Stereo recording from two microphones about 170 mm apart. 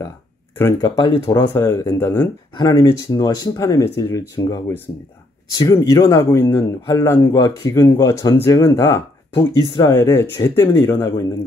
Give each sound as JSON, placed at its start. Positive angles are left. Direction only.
{"t": 0.6, "sound": "speech", "side_deg": 15}
{"t": 1.5, "sound": "speech", "side_deg": 15}
{"t": 5.5, "sound": "speech", "side_deg": 20}
{"t": 9.6, "sound": "speech", "side_deg": 30}
{"t": 9.8, "sound": "speech", "side_deg": 15}